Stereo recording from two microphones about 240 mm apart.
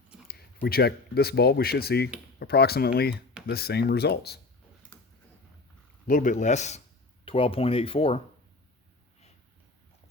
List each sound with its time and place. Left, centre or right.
0.3 s speech: left
6.1 s speech: left